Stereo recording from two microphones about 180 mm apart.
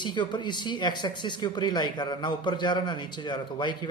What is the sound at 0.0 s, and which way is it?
Speech, 25° left (ahead or behind).